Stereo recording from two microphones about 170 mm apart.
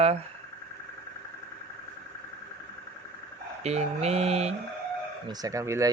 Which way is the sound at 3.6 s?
40° right (ahead or behind).